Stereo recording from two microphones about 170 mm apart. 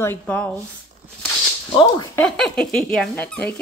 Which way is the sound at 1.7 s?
25° left (ahead or behind).